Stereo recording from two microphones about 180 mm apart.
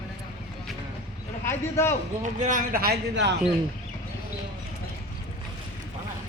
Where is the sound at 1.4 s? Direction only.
15° left (ahead or behind).